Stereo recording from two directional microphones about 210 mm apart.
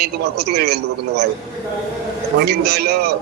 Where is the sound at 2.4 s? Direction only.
50° right (ahead or behind).